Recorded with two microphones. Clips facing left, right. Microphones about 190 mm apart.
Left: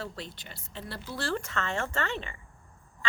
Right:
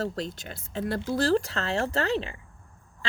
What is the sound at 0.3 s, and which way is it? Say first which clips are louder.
Speech: right 10 dB; 50° right (ahead or behind).